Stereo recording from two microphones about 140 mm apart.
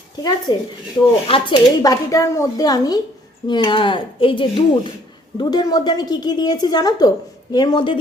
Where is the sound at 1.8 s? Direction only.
25° left (ahead or behind).